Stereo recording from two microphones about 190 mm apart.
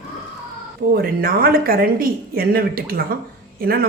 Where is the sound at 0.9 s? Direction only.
50° right (ahead or behind).